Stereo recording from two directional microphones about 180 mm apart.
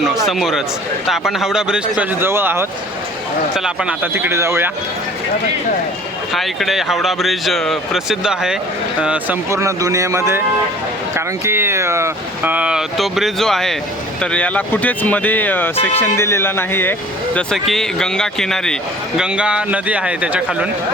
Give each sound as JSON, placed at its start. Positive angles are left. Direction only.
{"t": 0.3, "sound": "speech", "side_deg": 0}
{"t": 6.3, "sound": "speech", "side_deg": 0}